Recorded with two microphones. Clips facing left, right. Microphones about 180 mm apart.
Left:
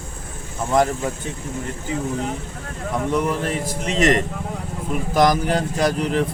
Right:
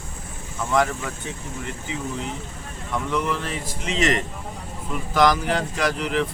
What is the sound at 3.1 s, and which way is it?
Speech, 45° left (ahead or behind).